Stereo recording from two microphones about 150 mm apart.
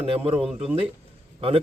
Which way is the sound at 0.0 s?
40° right (ahead or behind).